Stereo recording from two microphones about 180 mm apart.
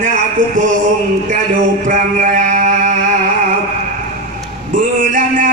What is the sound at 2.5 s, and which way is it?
Music, 45° right (ahead or behind).